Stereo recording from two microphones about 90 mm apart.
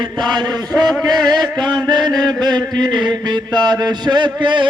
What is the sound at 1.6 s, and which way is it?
Mantra, 55° right (ahead or behind).